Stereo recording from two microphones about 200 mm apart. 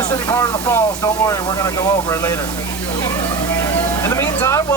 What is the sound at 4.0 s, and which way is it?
Vehicle, 15° left (ahead or behind).